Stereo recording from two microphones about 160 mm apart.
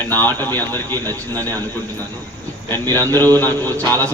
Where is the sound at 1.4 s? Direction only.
25° right (ahead or behind).